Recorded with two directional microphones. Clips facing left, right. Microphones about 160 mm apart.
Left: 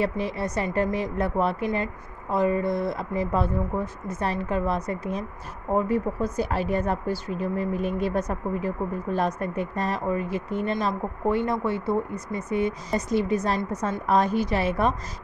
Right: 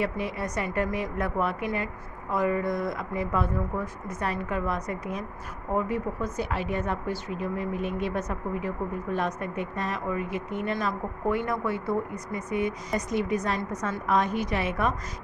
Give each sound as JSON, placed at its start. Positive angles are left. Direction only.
{"t": 0.0, "sound": "speech", "side_deg": 30}